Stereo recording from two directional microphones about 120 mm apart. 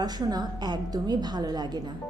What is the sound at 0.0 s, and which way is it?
Speech, 35° right (ahead or behind).